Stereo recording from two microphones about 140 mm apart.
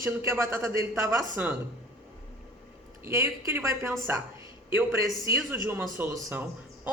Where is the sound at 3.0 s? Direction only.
20° right (ahead or behind).